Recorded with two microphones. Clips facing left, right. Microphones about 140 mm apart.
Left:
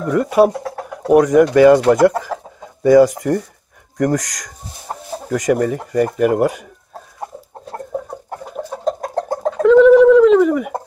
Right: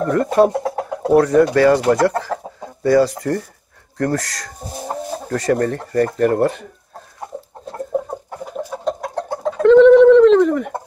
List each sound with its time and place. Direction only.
0.0 s speech: 10° left (ahead or behind)
0.7 s a sound: 20° right (ahead or behind)
1.1 s speech: 15° left (ahead or behind)
8.8 s chicken: 40° left (ahead or behind)
9.6 s bird: 5° left (ahead or behind)